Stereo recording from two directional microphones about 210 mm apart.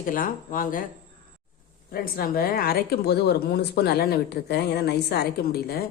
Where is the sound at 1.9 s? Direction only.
45° left (ahead or behind).